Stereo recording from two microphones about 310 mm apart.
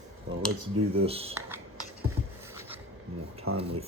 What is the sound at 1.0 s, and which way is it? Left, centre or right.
Speech, centre.